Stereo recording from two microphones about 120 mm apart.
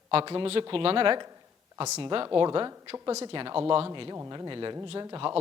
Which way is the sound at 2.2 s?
35° right (ahead or behind).